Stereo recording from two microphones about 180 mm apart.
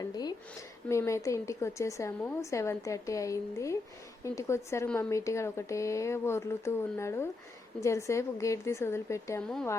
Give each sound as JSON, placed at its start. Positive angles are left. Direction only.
{"t": 0.0, "sound": "a woman's voice", "side_deg": 20}